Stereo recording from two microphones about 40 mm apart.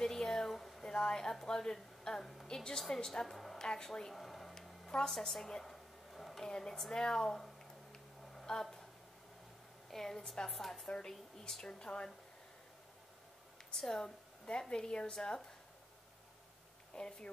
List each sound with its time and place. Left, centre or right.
0.0 s a sound: centre
2.4 s speech: centre
4.1 s a sound: centre
6.4 s speech: centre
7.9 s a sound: centre
9.8 s a woman's voice: centre
10.5 s a woman's voice: centre
11.8 s speech: left
13.7 s speech: centre
16.9 s speech: left